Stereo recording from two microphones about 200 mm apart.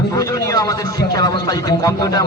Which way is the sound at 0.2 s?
15° left (ahead or behind).